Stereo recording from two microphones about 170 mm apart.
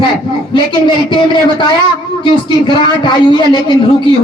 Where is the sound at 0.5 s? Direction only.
30° left (ahead or behind).